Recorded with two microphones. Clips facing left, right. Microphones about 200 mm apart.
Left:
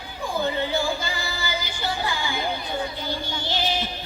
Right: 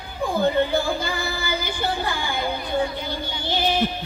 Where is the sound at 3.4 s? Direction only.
55° right (ahead or behind).